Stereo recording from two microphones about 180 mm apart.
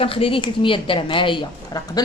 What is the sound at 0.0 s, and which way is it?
A woman's voice, 30° left (ahead or behind).